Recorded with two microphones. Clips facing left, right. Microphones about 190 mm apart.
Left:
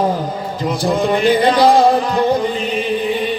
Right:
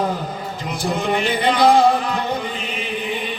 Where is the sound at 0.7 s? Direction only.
35° left (ahead or behind).